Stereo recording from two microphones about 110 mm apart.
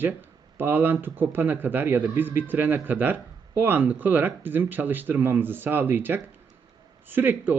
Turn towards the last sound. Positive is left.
turn(degrees=-20)  # may be behind; listen again after turning